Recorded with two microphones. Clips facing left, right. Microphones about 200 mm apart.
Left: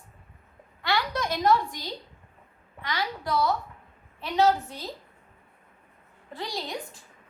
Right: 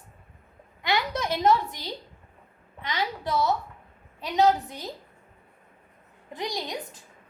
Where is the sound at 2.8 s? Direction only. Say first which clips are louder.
Right 1 dB; 20° right (ahead or behind).